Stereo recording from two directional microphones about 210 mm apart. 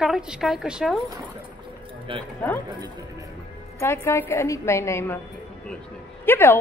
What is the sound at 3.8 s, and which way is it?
A woman's voice, 10° left (ahead or behind).